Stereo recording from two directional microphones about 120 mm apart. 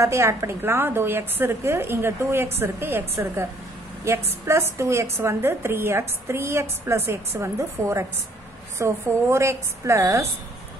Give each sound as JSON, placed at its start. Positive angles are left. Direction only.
{"t": 0.0, "sound": "a woman's voice", "side_deg": -25}